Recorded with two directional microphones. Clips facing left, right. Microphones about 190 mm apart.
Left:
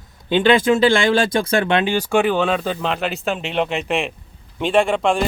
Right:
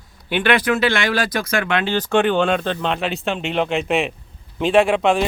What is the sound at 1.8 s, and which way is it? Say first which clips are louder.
Speech: even; 10° left (ahead or behind).